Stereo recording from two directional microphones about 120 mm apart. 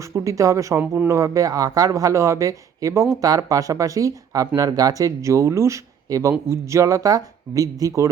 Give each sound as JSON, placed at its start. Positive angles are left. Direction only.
{"t": 0.1, "sound": "speech", "side_deg": -25}